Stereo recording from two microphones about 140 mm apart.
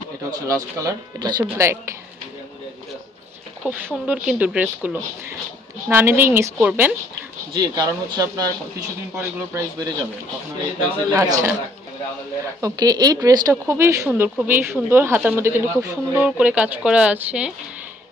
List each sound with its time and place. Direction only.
0.5 s speech: 25° right (ahead or behind)
3.6 s speech: 5° right (ahead or behind)
7.5 s speech: 30° right (ahead or behind)
11.1 s speech: 25° right (ahead or behind)
12.5 s speech: 25° right (ahead or behind)
16.1 s speech: 10° right (ahead or behind)